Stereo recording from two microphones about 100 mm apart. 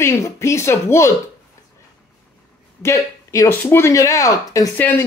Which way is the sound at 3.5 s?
20° left (ahead or behind).